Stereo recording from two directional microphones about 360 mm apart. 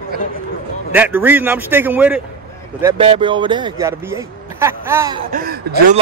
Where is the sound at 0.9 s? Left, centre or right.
Centre.